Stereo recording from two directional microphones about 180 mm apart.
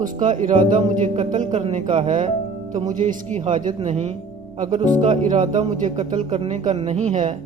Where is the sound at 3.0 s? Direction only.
45° right (ahead or behind).